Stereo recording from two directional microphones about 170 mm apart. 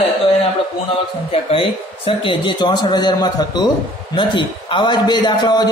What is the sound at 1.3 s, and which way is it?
A man's voice, 35° left (ahead or behind).